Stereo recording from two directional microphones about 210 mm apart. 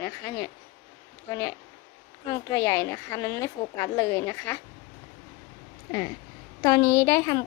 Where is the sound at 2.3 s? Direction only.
15° left (ahead or behind).